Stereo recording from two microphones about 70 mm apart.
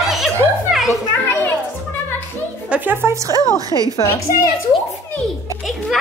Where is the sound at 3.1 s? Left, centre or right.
Right.